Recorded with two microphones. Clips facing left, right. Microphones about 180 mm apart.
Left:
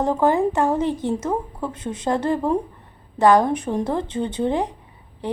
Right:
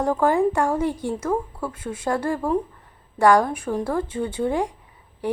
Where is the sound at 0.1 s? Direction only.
20° left (ahead or behind).